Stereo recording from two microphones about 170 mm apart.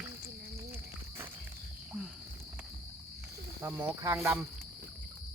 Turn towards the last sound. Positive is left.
turn(degrees=-15)  # may be behind; listen again after turning